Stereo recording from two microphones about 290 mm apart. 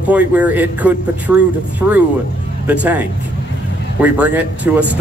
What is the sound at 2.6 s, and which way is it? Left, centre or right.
Speech, centre.